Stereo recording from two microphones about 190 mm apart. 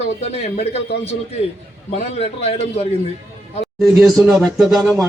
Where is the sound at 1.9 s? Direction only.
35° left (ahead or behind).